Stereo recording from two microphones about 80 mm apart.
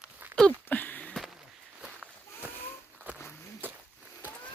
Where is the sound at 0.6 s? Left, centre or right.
Left.